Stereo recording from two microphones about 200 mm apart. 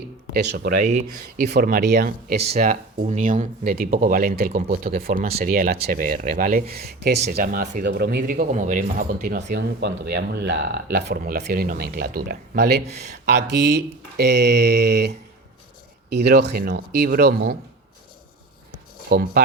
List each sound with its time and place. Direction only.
0.3 s speech: 55° right (ahead or behind)
0.8 s speech: 35° right (ahead or behind)
1.5 s speech: 50° right (ahead or behind)
19.0 s speech: 50° right (ahead or behind)